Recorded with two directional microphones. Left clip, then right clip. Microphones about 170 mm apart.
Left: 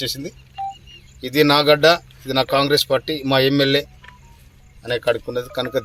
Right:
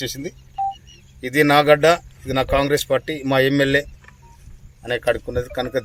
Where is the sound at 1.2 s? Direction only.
5° right (ahead or behind).